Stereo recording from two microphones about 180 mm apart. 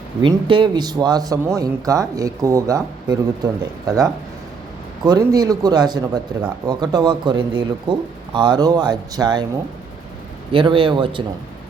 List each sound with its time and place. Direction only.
0.2 s speech: 25° right (ahead or behind)
10.5 s speech: 30° right (ahead or behind)